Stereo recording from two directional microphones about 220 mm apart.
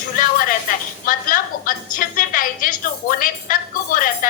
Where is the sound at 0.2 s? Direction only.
40° left (ahead or behind).